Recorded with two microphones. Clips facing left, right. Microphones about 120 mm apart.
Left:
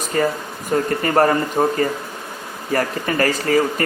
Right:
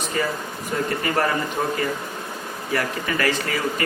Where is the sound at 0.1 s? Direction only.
45° left (ahead or behind).